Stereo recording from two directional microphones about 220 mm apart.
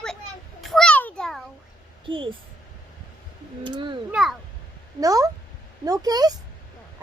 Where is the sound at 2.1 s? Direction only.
25° right (ahead or behind).